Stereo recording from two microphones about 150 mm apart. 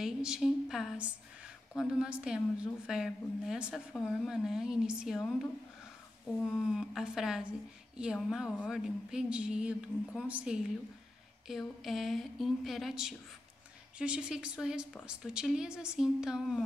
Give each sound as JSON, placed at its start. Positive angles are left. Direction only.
{"t": 0.0, "sound": "a woman's voice", "side_deg": -5}
{"t": 6.7, "sound": "a woman's voice", "side_deg": -5}